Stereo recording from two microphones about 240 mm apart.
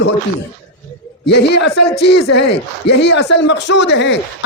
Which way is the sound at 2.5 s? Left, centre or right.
Left.